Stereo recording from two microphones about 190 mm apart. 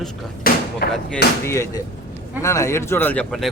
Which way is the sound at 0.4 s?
50° left (ahead or behind).